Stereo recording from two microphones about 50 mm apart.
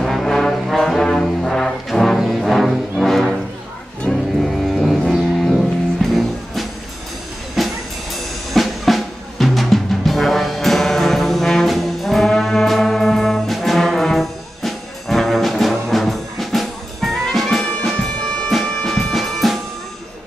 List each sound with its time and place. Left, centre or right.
0.0 s brass instrument: centre
2.1 s music: centre
7.5 s drum kit: centre
11.4 s brass instrument: centre
17.9 s music: centre